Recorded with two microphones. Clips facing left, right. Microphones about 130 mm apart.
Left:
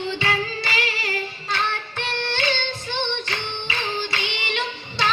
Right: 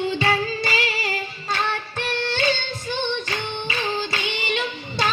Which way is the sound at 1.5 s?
45° right (ahead or behind).